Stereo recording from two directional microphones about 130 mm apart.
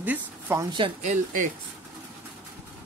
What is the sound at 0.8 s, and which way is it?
Speech, 40° right (ahead or behind).